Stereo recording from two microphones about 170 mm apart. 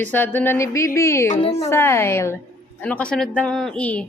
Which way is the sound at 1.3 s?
35° left (ahead or behind).